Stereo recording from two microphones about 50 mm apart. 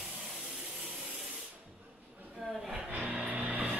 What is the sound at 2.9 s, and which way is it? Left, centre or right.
Music, right.